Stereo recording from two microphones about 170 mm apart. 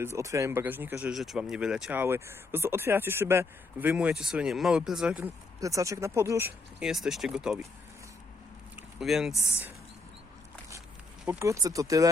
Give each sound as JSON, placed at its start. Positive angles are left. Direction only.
{"t": 0.0, "sound": "speech", "side_deg": -15}
{"t": 1.1, "sound": "speech", "side_deg": 0}
{"t": 5.5, "sound": "speech", "side_deg": -20}
{"t": 8.7, "sound": "vehicle", "side_deg": 0}
{"t": 11.3, "sound": "speech", "side_deg": -15}